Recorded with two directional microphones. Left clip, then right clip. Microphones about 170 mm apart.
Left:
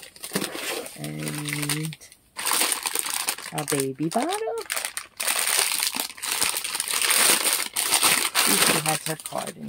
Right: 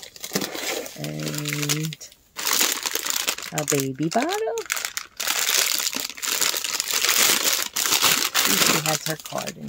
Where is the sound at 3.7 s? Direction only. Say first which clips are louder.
Right 1 dB; 15° right (ahead or behind).